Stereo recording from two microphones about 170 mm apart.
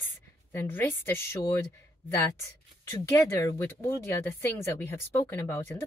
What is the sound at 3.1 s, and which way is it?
Speech, 20° left (ahead or behind).